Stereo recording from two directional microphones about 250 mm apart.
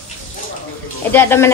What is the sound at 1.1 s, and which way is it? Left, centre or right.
Speech, centre.